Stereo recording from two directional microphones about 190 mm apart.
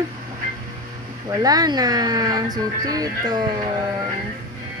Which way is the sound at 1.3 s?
20° right (ahead or behind).